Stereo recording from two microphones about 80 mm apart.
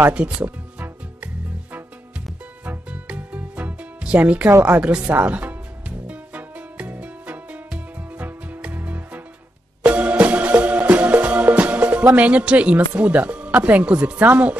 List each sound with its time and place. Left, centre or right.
0.1 s speech: centre
1.2 s music: centre